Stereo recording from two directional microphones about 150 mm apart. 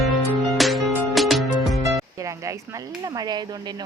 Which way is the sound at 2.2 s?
20° right (ahead or behind).